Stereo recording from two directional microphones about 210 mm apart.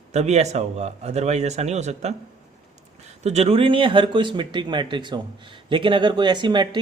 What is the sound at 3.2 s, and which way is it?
Speech, 30° right (ahead or behind).